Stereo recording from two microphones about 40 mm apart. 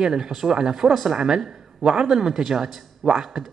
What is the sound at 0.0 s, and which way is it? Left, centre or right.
Speech, centre.